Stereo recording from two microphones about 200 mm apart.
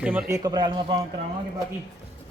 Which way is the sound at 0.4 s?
20° right (ahead or behind).